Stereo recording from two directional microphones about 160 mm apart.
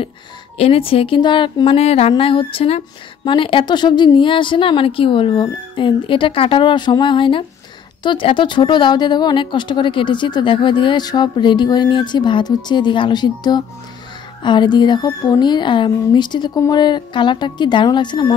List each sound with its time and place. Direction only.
0.6 s a woman's voice: 35° left (ahead or behind)